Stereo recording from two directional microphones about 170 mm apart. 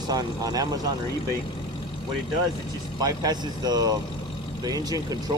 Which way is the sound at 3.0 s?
25° right (ahead or behind).